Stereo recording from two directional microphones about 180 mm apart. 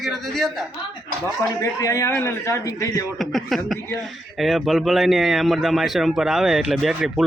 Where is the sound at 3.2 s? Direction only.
Centre (ahead or behind).